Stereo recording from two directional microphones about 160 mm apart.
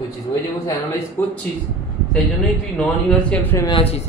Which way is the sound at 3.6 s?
35° left (ahead or behind).